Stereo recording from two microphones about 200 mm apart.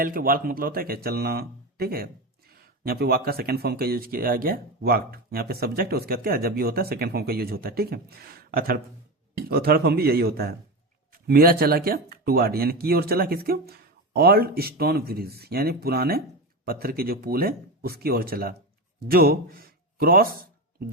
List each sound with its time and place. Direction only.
0.0 s speech: 45° right (ahead or behind)